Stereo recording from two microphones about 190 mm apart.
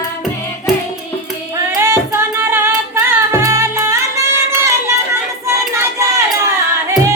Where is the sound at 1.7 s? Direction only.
15° right (ahead or behind).